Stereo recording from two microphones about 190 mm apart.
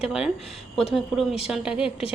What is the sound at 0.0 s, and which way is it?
A woman's voice, 5° right (ahead or behind).